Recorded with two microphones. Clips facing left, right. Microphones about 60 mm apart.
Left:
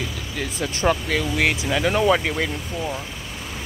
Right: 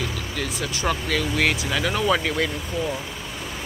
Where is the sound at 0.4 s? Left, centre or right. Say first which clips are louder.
Left 2 dB; left.